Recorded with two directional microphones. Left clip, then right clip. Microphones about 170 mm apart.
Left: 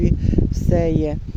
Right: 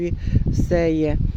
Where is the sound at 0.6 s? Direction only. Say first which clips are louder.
Right 1 dB; 20° right (ahead or behind).